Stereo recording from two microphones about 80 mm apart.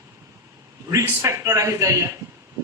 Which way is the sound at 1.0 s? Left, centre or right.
Right.